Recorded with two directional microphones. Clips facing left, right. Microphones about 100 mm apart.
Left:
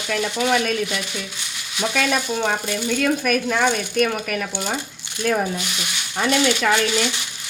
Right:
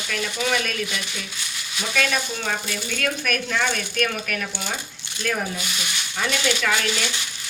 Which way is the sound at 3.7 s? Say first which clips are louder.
Left 5 dB; 20° left (ahead or behind).